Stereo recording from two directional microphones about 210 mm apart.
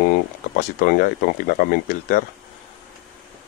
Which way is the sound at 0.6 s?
45° left (ahead or behind).